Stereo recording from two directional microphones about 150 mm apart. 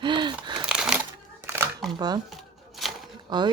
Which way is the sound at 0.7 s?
5° right (ahead or behind).